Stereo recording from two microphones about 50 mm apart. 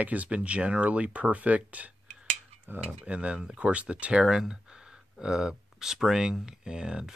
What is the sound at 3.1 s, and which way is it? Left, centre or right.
Speech, right.